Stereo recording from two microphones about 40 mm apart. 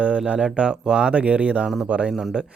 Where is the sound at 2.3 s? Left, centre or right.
Right.